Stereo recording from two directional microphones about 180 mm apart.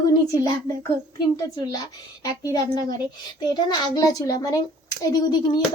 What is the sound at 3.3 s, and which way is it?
A child's voice, 25° left (ahead or behind).